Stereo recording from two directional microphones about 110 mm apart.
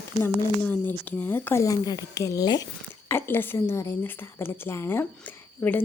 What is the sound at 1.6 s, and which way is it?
Speech, 35° left (ahead or behind).